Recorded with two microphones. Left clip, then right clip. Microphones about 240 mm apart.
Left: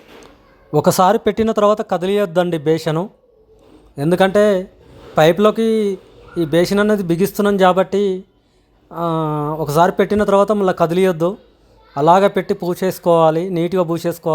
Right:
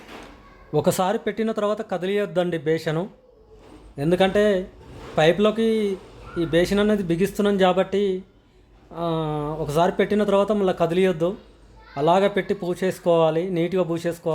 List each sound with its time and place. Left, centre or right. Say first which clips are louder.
0.7 s speech: left 8 dB; left